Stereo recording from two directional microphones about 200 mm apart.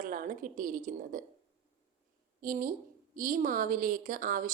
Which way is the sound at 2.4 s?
45° right (ahead or behind).